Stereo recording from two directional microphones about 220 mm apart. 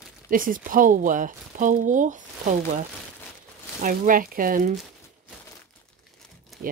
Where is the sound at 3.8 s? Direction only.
40° right (ahead or behind).